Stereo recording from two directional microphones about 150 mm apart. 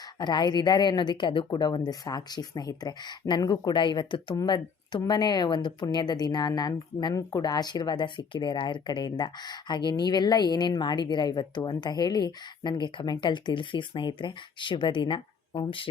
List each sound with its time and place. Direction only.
0.2 s speech: 30° left (ahead or behind)